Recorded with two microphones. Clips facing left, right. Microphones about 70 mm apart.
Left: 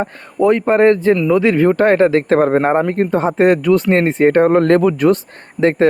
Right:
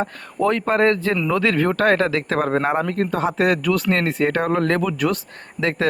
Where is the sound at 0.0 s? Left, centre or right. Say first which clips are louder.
Left 6 dB; centre.